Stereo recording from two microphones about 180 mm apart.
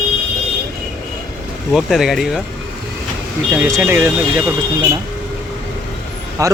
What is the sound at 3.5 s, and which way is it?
Speech, 10° right (ahead or behind).